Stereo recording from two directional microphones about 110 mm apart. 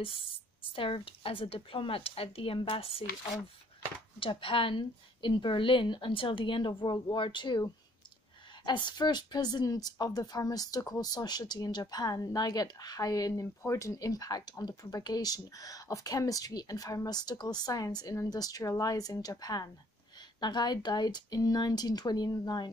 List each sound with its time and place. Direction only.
0.0 s a woman's voice: 55° left (ahead or behind)
4.2 s a woman's voice: 55° left (ahead or behind)
8.6 s a woman's voice: 45° left (ahead or behind)